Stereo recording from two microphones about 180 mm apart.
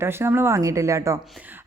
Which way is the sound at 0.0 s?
15° right (ahead or behind).